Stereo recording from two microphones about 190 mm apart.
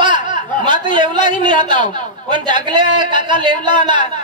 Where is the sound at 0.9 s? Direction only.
25° right (ahead or behind).